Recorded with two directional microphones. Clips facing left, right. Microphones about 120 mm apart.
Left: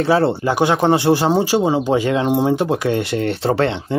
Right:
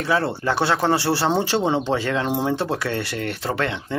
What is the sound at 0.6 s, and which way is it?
Speech, 15° left (ahead or behind).